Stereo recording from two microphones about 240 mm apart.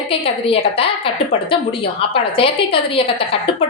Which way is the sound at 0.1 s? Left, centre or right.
Left.